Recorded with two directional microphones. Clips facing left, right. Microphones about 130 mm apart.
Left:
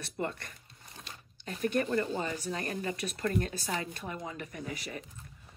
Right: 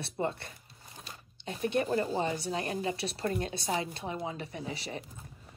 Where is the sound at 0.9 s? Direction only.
5° right (ahead or behind).